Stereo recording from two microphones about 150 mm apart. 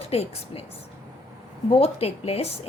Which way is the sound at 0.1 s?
40° left (ahead or behind).